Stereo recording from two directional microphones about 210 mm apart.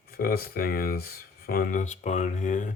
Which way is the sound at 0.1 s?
45° left (ahead or behind).